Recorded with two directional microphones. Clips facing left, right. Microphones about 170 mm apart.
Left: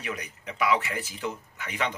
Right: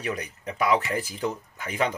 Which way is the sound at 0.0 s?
35° right (ahead or behind).